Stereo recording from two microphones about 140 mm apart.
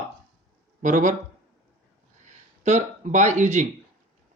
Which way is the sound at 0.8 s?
65° right (ahead or behind).